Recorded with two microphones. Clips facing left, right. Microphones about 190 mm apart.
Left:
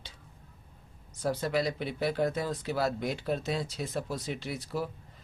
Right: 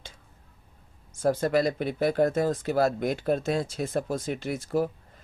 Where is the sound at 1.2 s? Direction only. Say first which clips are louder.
Right 6 dB; 45° right (ahead or behind).